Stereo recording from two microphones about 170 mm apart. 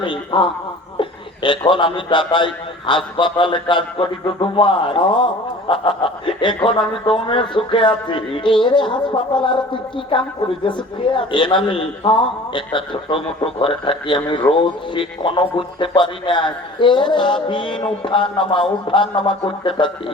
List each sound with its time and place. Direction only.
0.0 s a man's voice: 30° left (ahead or behind)